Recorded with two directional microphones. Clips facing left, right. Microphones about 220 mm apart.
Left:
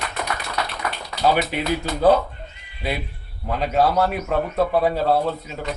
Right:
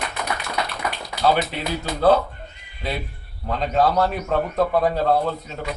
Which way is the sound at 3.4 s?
10° left (ahead or behind).